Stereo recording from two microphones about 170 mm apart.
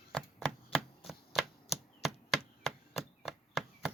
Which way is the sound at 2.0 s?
Centre (ahead or behind).